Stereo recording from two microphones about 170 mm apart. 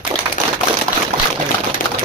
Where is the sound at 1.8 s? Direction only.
50° left (ahead or behind).